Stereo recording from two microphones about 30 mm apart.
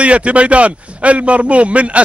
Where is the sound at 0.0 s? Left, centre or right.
Right.